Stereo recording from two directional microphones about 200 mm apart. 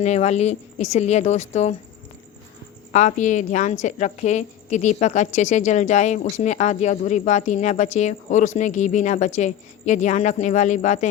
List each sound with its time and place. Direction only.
0.0 s speech: 35° left (ahead or behind)
2.9 s speech: 35° left (ahead or behind)